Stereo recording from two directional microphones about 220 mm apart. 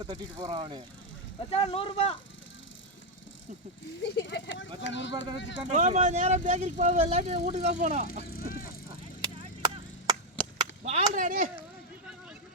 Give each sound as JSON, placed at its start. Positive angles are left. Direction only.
{"t": 0.0, "sound": "speech", "side_deg": -20}
{"t": 1.5, "sound": "speech", "side_deg": 25}
{"t": 4.0, "sound": "speech", "side_deg": 50}
{"t": 5.7, "sound": "speech", "side_deg": -30}
{"t": 8.3, "sound": "speech", "side_deg": 40}
{"t": 9.4, "sound": "chop", "side_deg": -25}
{"t": 10.4, "sound": "chop", "side_deg": 5}
{"t": 10.8, "sound": "speech", "side_deg": -30}